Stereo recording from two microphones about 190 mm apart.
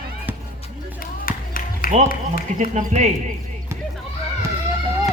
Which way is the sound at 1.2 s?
50° left (ahead or behind).